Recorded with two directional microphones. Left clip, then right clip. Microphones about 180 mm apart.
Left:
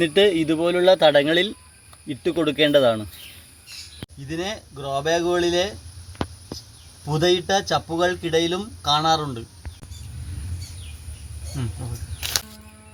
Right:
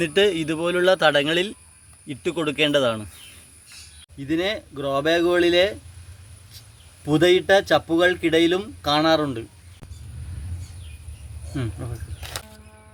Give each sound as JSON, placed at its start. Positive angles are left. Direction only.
{"t": 0.0, "sound": "a man's voice", "side_deg": 10}
{"t": 4.3, "sound": "speech", "side_deg": -70}
{"t": 7.1, "sound": "speech", "side_deg": -70}